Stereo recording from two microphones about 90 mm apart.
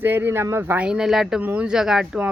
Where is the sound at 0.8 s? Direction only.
10° right (ahead or behind).